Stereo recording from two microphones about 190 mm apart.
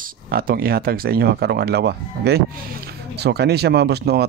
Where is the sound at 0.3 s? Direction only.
50° right (ahead or behind).